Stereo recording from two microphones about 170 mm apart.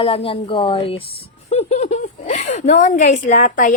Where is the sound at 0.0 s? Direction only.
30° left (ahead or behind).